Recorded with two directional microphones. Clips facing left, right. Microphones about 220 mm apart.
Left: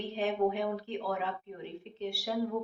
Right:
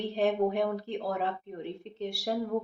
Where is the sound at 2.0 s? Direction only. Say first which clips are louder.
Right 3 dB; 40° right (ahead or behind).